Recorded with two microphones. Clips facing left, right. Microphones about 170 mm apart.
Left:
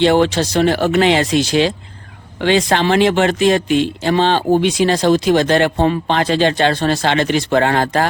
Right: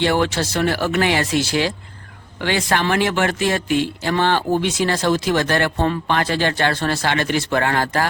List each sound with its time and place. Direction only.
0.0 s speech: 20° left (ahead or behind)